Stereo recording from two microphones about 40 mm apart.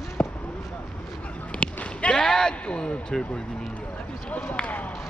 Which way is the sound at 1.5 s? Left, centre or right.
Left.